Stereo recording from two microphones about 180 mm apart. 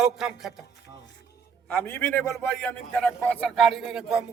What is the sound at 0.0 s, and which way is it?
Speech, 5° right (ahead or behind).